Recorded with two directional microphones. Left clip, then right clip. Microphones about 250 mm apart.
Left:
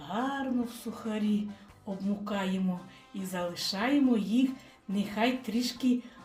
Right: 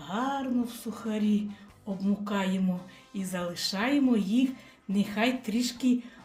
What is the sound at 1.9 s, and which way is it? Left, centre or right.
Speech, centre.